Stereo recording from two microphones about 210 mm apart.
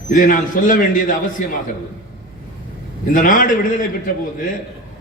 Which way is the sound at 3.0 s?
40° left (ahead or behind).